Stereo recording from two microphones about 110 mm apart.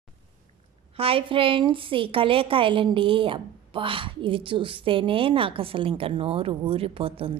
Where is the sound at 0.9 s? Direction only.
60° right (ahead or behind).